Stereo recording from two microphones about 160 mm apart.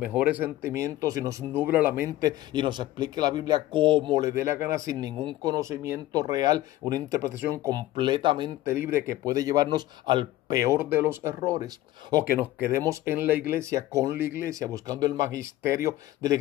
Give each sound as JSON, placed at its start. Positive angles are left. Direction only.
{"t": 0.0, "sound": "speech", "side_deg": -10}
{"t": 2.0, "sound": "speech", "side_deg": -25}
{"t": 7.9, "sound": "speech", "side_deg": -30}
{"t": 8.9, "sound": "speech", "side_deg": -20}